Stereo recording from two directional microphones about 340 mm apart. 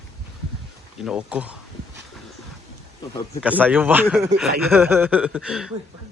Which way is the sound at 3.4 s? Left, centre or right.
Centre.